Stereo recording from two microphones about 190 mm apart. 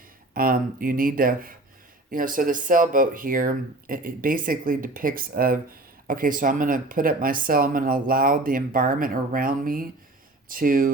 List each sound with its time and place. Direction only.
0.3 s speech: 50° right (ahead or behind)